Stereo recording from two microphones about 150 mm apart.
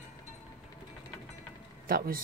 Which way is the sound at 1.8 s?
75° right (ahead or behind).